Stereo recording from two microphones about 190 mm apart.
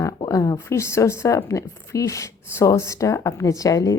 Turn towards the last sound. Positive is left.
turn(degrees=15)  # may be behind; listen again after turning